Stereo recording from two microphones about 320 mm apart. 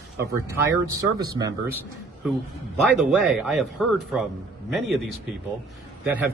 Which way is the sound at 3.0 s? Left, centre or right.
Centre.